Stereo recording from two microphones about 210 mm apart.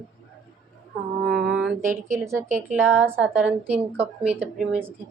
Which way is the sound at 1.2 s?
5° right (ahead or behind).